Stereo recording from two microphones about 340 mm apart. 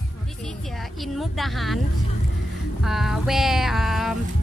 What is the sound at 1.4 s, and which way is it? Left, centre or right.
Speech, centre.